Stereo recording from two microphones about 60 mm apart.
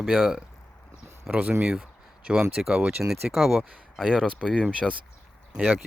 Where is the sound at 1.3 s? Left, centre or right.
Right.